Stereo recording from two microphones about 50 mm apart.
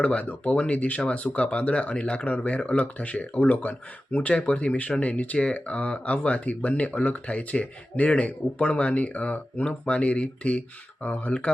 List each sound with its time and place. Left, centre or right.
0.0 s speech: left